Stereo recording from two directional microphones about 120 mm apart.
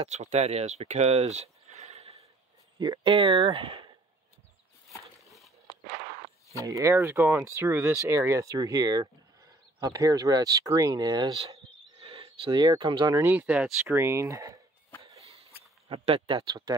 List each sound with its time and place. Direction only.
0.0 s speech: 70° right (ahead or behind)
3.0 s speech: 45° right (ahead or behind)
5.7 s a sound: 30° left (ahead or behind)
6.6 s speech: 25° right (ahead or behind)
12.0 s speech: 45° right (ahead or behind)
13.1 s speech: 20° right (ahead or behind)
15.1 s a sound: 55° right (ahead or behind)
15.9 s speech: 45° right (ahead or behind)